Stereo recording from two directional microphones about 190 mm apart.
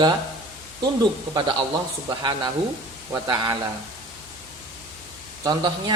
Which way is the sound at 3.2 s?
25° right (ahead or behind).